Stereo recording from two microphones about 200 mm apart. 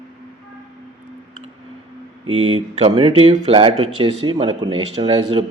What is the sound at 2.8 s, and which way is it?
Speech, 25° right (ahead or behind).